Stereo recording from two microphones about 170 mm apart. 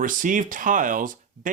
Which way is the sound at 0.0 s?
50° right (ahead or behind).